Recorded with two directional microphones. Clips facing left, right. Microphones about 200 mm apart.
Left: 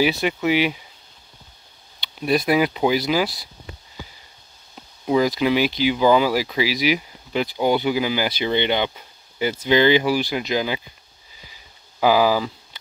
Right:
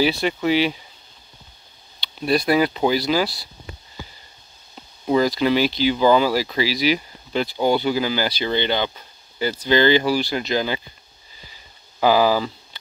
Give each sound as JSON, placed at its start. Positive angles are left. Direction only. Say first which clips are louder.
{"t": 0.0, "sound": "speech", "louder": "even", "side_deg": 15}
{"t": 2.2, "sound": "speech", "louder": "even", "side_deg": 15}
{"t": 5.0, "sound": "speech", "louder": "even", "side_deg": 10}
{"t": 12.0, "sound": "speech", "louder": "even", "side_deg": 10}